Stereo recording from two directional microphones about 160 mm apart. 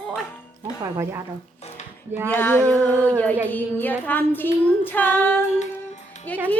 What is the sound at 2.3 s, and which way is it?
Child singing, 15° left (ahead or behind).